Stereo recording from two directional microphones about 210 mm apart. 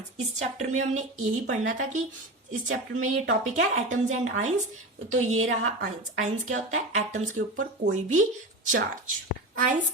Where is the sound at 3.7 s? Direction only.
35° right (ahead or behind).